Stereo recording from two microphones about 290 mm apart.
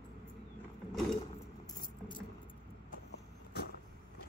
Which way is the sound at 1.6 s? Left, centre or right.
Centre.